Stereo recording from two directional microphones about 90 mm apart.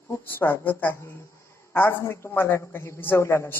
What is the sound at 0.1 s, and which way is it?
A man's voice, 25° left (ahead or behind).